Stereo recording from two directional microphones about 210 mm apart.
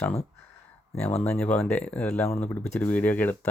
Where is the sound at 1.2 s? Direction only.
5° left (ahead or behind).